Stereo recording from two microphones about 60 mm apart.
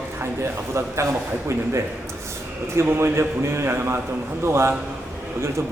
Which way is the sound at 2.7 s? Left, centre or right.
Right.